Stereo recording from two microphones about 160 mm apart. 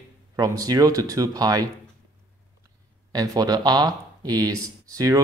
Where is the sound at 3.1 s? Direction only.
25° right (ahead or behind).